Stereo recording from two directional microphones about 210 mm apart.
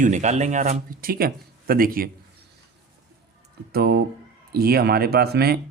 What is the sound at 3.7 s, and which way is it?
Speech, 45° right (ahead or behind).